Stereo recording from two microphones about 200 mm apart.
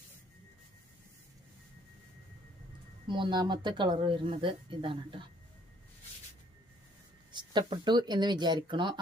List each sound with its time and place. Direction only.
3.1 s speech: 25° right (ahead or behind)
7.3 s speech: 20° right (ahead or behind)